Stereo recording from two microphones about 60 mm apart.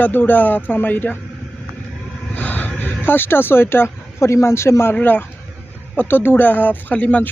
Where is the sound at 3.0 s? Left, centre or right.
Left.